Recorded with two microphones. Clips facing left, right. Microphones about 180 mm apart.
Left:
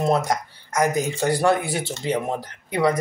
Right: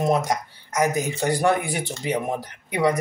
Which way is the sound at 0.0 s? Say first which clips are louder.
Left 1 dB; 15° right (ahead or behind).